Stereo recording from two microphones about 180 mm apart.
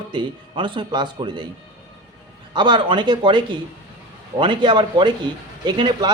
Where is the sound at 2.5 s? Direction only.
25° right (ahead or behind).